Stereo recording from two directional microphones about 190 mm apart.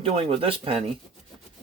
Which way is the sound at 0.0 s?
30° right (ahead or behind).